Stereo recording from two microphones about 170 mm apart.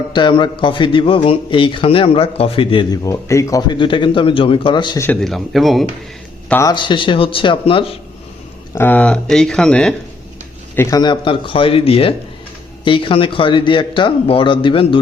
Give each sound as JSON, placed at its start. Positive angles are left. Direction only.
{"t": 0.1, "sound": "a man's voice", "side_deg": 30}
{"t": 5.0, "sound": "speech", "side_deg": 0}
{"t": 6.5, "sound": "speech", "side_deg": 15}
{"t": 6.7, "sound": "speech", "side_deg": 30}
{"t": 8.7, "sound": "speech", "side_deg": 10}
{"t": 10.8, "sound": "a man's voice", "side_deg": 20}